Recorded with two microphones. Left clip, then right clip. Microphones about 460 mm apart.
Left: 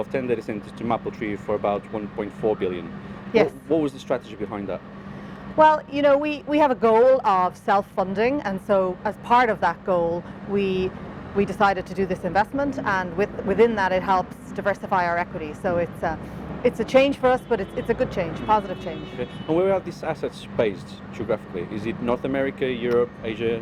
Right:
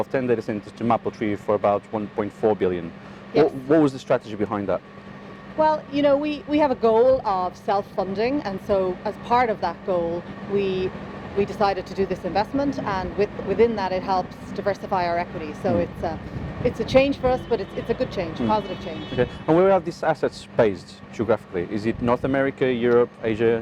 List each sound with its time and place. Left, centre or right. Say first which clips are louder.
0.0 s speech: right 2 dB; right
5.5 s speech: left 4 dB; left
19.2 s speech: right 4 dB; right